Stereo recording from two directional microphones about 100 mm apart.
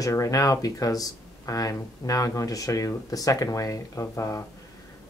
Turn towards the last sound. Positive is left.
turn(degrees=30)  # may be behind; listen again after turning